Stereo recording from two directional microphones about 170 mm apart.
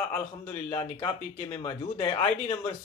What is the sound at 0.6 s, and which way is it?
Speech, 40° left (ahead or behind).